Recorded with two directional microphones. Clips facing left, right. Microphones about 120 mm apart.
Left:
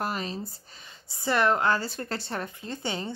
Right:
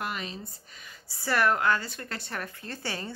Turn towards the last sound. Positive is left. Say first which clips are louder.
# left 3 dB
turn(degrees=20)  # may be behind; listen again after turning